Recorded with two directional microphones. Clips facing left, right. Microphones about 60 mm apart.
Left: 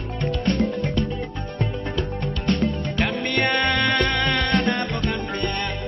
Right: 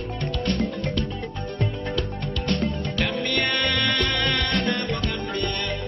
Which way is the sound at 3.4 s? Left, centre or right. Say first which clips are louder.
Left 6 dB; left.